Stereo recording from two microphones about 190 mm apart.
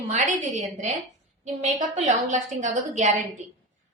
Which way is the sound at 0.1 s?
40° right (ahead or behind).